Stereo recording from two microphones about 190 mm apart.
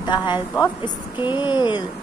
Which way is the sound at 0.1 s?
25° left (ahead or behind).